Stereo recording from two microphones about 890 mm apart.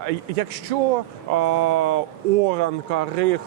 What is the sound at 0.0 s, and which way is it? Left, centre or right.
A man's voice, right.